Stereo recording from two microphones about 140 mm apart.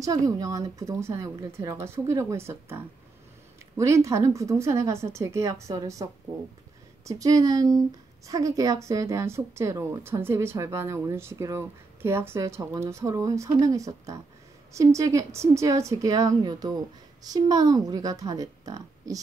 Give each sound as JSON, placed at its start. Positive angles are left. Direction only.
{"t": 0.0, "sound": "a woman's voice", "side_deg": -25}
{"t": 7.1, "sound": "a woman's voice", "side_deg": -25}